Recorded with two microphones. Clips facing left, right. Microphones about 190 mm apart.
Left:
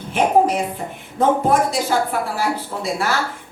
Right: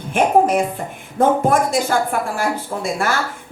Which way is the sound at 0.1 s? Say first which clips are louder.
Right 1 dB; 50° right (ahead or behind).